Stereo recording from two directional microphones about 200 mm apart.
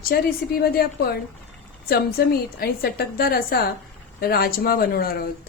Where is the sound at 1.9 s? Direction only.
50° left (ahead or behind).